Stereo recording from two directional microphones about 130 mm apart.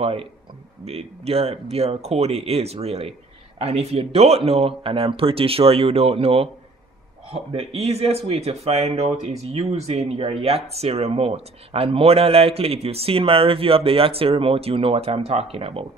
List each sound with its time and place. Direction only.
0.0 s speech: 45° right (ahead or behind)